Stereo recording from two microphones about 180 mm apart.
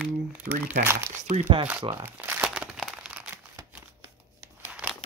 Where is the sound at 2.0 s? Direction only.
10° right (ahead or behind).